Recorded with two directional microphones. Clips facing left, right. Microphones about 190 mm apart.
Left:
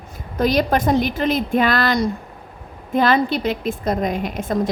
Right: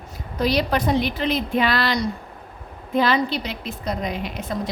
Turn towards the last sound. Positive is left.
turn(degrees=50)  # may be behind; listen again after turning